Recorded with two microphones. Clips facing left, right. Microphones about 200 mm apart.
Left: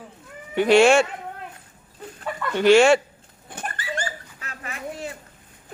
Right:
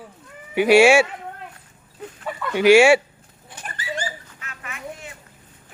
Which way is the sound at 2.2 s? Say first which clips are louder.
Right 2 dB; 5° right (ahead or behind).